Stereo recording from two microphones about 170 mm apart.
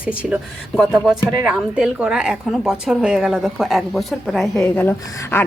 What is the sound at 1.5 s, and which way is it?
A woman's voice, 5° right (ahead or behind).